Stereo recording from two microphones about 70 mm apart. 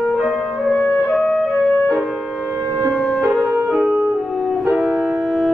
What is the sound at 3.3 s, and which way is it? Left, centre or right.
Music, centre.